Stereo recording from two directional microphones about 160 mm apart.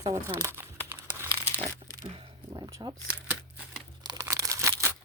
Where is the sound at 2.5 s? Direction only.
25° right (ahead or behind).